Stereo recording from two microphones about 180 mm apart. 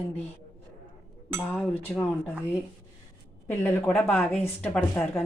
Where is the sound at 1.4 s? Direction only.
10° left (ahead or behind).